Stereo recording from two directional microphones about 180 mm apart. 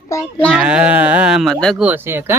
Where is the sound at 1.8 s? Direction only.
10° right (ahead or behind).